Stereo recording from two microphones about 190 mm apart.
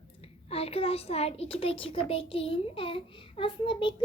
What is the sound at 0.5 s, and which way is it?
A child's voice, 30° left (ahead or behind).